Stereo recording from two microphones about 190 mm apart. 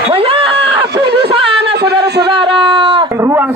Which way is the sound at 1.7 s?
60° right (ahead or behind).